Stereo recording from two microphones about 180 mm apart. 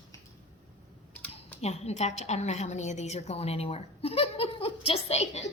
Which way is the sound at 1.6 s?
35° left (ahead or behind).